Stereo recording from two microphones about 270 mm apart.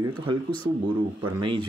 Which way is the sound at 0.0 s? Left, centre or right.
Centre.